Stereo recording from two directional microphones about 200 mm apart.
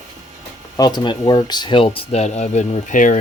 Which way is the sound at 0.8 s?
20° left (ahead or behind).